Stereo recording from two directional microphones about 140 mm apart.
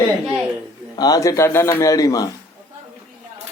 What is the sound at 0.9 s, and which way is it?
A man's voice, 25° left (ahead or behind).